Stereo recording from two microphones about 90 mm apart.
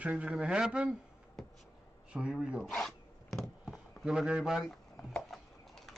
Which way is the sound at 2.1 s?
10° right (ahead or behind).